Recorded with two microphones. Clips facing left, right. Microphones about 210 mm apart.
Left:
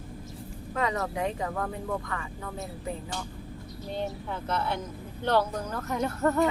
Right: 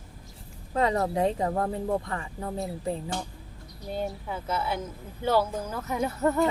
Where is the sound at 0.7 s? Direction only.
30° right (ahead or behind).